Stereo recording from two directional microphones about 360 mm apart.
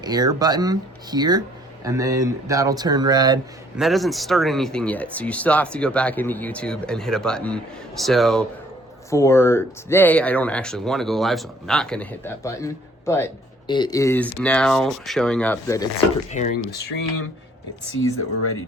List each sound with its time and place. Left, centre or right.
0.0 s speech: centre
3.8 s speech: centre
16.3 s speech: left